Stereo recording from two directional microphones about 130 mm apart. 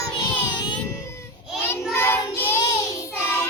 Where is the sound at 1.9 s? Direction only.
20° left (ahead or behind).